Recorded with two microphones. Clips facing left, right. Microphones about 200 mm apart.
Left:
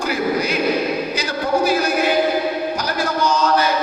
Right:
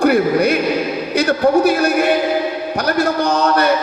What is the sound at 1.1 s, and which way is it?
Speech, 60° right (ahead or behind).